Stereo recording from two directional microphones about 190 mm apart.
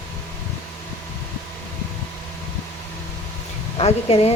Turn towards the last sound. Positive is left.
turn(degrees=30)  # may be behind; listen again after turning